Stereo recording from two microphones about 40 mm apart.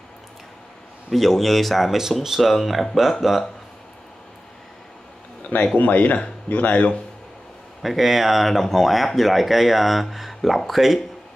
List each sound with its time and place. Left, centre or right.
1.1 s speech: centre
2.0 s speech: centre
5.8 s speech: left
7.8 s speech: centre